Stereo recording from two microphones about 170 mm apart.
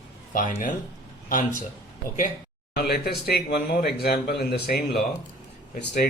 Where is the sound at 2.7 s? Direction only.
65° left (ahead or behind).